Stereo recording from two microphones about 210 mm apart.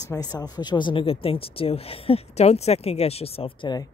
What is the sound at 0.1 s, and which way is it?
A woman's voice, 20° left (ahead or behind).